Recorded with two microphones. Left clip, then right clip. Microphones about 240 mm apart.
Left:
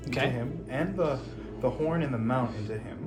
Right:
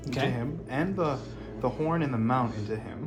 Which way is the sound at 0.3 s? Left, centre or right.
Right.